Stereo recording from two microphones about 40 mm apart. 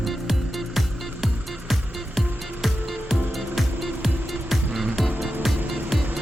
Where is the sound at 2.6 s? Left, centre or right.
Centre.